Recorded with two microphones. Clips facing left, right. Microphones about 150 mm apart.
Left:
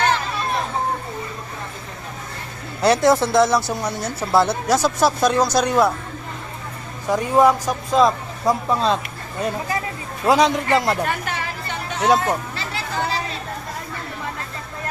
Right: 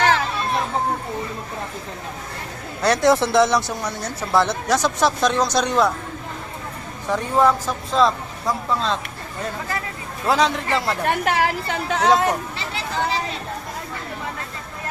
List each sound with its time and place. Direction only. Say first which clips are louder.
2.8 s speech: left 1 dB; 5° left (ahead or behind)
7.1 s speech: left 2 dB; 10° left (ahead or behind)
11.0 s a woman's voice: right 5 dB; 65° right (ahead or behind); by 12.0 s 90° right
12.0 s speech: even; 5° left (ahead or behind)